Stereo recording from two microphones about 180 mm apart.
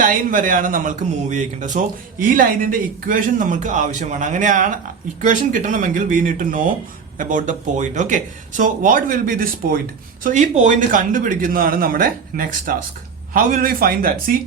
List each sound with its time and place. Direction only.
0.0 s speech: 50° right (ahead or behind)
10.2 s speech: 40° right (ahead or behind)